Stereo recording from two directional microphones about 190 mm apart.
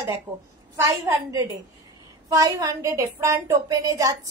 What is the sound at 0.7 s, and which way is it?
A woman's voice, 15° right (ahead or behind).